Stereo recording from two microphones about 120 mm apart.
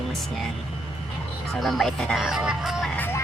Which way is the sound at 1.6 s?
Centre (ahead or behind).